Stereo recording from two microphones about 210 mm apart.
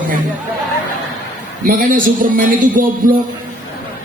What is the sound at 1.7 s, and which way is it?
A man's voice, 40° right (ahead or behind).